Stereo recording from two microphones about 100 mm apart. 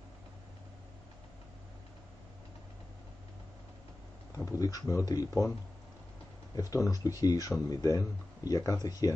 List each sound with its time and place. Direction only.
4.5 s speech: 35° left (ahead or behind)
6.5 s speech: 35° left (ahead or behind)